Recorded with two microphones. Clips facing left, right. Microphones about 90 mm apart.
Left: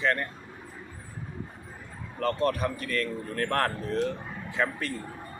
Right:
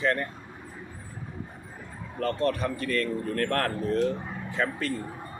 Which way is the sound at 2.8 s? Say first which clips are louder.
Right 3 dB; centre (ahead or behind).